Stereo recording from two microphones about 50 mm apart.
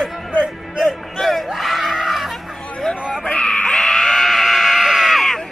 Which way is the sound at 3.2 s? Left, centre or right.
Left.